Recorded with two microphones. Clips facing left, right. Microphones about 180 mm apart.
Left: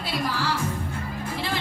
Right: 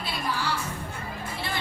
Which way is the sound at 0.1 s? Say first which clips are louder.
Left 3 dB; 90° left.